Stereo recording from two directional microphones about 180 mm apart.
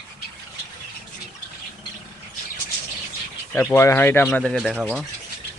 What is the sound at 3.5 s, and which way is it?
Speech, 15° left (ahead or behind).